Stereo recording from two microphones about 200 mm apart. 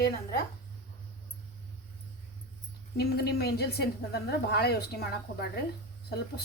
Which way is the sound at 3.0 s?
50° left (ahead or behind).